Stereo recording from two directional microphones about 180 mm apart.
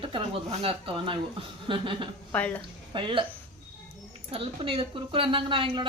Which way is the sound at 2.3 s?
10° left (ahead or behind).